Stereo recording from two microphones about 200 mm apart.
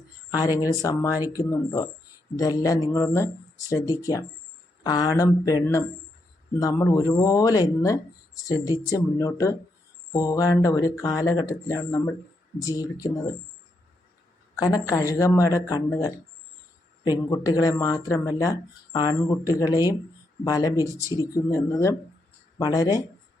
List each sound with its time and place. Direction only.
0.3 s speech: 20° left (ahead or behind)
6.6 s speech: 15° left (ahead or behind)
14.6 s speech: 20° left (ahead or behind)